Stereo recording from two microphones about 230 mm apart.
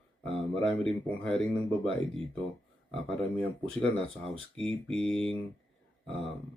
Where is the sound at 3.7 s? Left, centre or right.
Centre.